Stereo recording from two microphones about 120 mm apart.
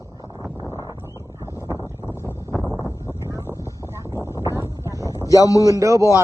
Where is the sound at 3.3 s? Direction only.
25° right (ahead or behind).